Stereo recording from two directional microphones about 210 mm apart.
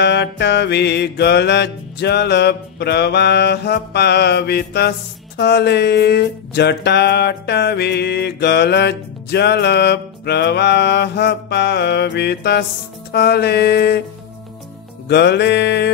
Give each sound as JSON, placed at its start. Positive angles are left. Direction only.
{"t": 0.0, "sound": "music", "side_deg": 55}
{"t": 15.0, "sound": "music", "side_deg": 55}